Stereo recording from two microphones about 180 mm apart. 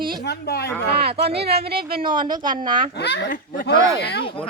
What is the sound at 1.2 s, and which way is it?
Speech, 65° right (ahead or behind).